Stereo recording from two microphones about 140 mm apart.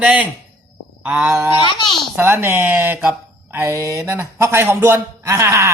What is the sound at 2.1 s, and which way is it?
A man's voice, 15° right (ahead or behind).